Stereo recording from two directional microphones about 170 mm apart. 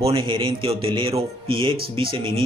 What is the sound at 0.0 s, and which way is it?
Speech, 30° right (ahead or behind).